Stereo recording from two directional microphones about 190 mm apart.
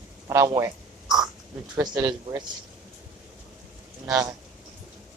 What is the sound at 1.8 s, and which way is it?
Speech, 20° right (ahead or behind).